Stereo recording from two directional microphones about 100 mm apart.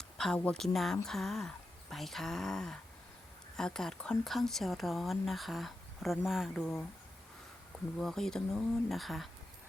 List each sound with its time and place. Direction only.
0.3 s speech: 15° left (ahead or behind)
0.6 s speech: 5° left (ahead or behind)
7.9 s speech: 5° left (ahead or behind)